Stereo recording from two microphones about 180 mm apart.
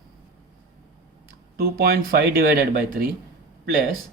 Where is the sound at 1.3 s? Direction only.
55° right (ahead or behind).